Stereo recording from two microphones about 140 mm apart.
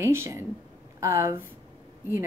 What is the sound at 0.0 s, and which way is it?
A woman's voice, 20° right (ahead or behind).